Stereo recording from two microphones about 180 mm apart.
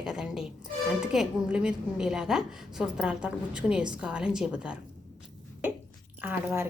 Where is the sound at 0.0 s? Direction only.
5° right (ahead or behind).